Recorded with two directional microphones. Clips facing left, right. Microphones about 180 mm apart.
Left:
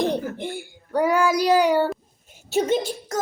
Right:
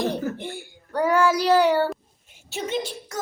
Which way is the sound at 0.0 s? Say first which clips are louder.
Left 2 dB; 15° left (ahead or behind).